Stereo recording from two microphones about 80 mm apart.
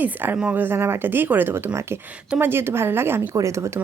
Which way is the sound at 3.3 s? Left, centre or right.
Right.